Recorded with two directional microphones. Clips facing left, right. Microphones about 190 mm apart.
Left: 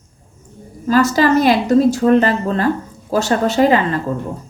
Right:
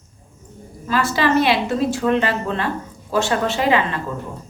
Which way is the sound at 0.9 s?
40° left (ahead or behind).